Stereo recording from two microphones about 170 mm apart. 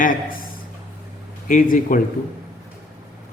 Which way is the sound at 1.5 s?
55° left (ahead or behind).